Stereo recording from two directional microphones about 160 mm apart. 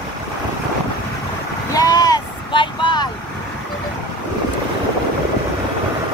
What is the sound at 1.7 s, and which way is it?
Vehicle, 25° left (ahead or behind).